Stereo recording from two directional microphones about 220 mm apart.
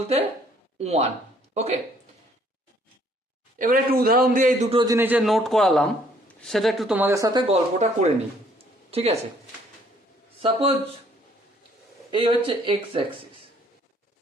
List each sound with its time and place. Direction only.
0.8 s speech: 30° right (ahead or behind)
3.6 s speech: 40° right (ahead or behind); by 4.9 s 25° right (ahead or behind)
4.9 s speech: 5° right (ahead or behind)
7.4 s speech: 30° right (ahead or behind)
8.5 s a sound: 25° right (ahead or behind)
10.4 s speech: 25° right (ahead or behind)
12.1 s speech: 20° right (ahead or behind)